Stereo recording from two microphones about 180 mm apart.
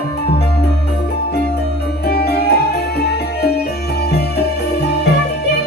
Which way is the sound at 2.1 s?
60° left (ahead or behind).